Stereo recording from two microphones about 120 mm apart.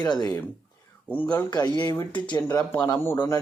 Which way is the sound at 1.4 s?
35° left (ahead or behind).